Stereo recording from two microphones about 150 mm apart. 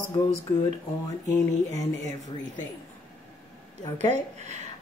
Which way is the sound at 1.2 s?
25° left (ahead or behind).